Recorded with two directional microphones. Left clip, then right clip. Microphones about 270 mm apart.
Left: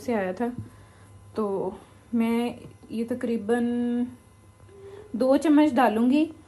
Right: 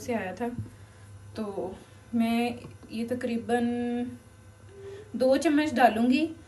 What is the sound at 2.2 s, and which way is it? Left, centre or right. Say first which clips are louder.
A woman's voice: even; centre.